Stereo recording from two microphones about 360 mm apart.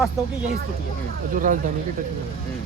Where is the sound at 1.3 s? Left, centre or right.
Right.